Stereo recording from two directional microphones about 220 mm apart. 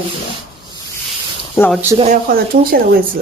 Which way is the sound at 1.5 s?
10° left (ahead or behind).